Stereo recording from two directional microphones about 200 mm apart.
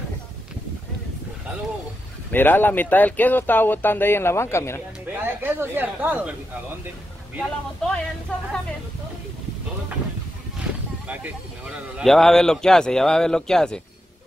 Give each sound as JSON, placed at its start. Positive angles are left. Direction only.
{"t": 2.3, "sound": "speech", "side_deg": 10}
{"t": 5.2, "sound": "speech", "side_deg": -10}
{"t": 7.3, "sound": "speech", "side_deg": 5}
{"t": 10.6, "sound": "a sound", "side_deg": -5}
{"t": 12.0, "sound": "speech", "side_deg": 0}